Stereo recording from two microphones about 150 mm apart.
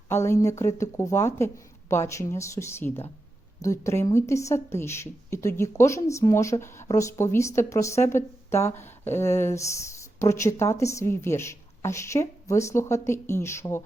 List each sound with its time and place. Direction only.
0.1 s a woman's voice: 15° left (ahead or behind)